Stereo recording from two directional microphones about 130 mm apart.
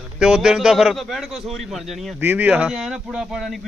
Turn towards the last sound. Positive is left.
turn(degrees=0)  # may be behind; listen again after turning